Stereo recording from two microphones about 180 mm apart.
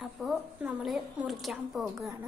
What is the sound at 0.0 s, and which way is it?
A woman's voice, centre (ahead or behind).